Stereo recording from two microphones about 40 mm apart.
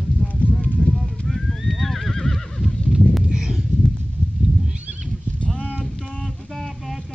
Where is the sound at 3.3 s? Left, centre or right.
Centre.